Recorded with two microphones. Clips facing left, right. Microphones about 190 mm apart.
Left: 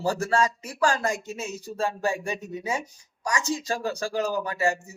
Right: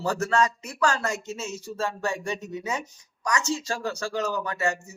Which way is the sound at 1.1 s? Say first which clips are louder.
Even; 15° left (ahead or behind).